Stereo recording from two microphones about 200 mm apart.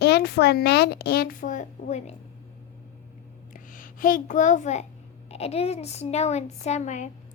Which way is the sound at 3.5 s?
45° left (ahead or behind).